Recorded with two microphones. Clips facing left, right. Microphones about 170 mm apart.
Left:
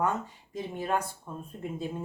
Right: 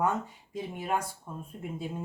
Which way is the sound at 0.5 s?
15° right (ahead or behind).